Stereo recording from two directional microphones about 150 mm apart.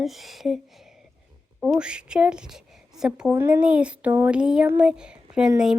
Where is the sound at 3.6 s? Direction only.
5° right (ahead or behind).